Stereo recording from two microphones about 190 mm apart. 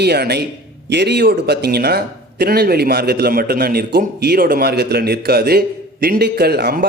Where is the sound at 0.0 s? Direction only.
60° right (ahead or behind).